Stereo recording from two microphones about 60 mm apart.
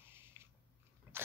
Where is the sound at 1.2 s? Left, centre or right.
Right.